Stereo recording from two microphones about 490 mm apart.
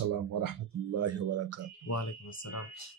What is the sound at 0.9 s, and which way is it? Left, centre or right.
Speech, right.